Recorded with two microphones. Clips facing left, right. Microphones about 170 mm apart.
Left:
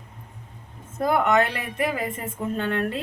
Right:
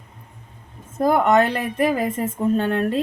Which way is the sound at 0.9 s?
35° right (ahead or behind).